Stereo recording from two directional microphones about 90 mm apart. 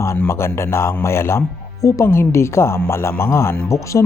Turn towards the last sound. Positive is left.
turn(degrees=35)  # may be behind; listen again after turning